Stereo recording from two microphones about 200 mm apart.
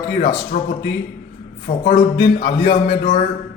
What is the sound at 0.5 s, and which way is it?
Speech, 40° left (ahead or behind).